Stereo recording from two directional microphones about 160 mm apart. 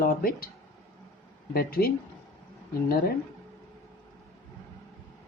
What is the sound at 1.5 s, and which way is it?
Speech, 70° left (ahead or behind).